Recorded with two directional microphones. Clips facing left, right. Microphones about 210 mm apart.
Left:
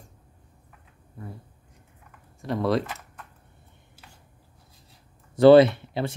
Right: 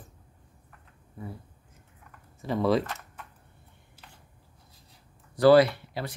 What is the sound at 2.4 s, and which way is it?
Speech, centre (ahead or behind).